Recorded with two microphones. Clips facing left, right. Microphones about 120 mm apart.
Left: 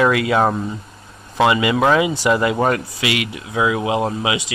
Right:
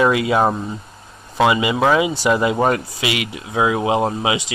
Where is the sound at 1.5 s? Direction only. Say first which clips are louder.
Left 1 dB; 20° right (ahead or behind).